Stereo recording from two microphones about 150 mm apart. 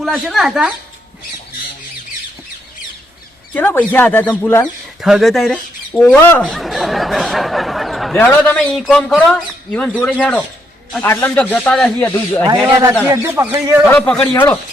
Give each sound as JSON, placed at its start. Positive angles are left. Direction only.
{"t": 0.0, "sound": "speech", "side_deg": 0}
{"t": 3.5, "sound": "speech", "side_deg": 15}
{"t": 5.0, "sound": "speech", "side_deg": 0}
{"t": 6.4, "sound": "a sound", "side_deg": 0}
{"t": 8.2, "sound": "speech", "side_deg": 10}
{"t": 13.1, "sound": "speech", "side_deg": -20}
{"t": 13.8, "sound": "speech", "side_deg": 10}